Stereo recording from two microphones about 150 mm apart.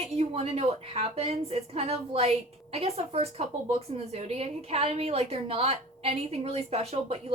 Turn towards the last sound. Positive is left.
turn(degrees=-40)  # may be behind; listen again after turning